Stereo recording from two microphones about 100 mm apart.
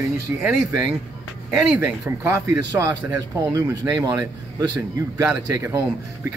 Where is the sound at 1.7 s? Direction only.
15° right (ahead or behind).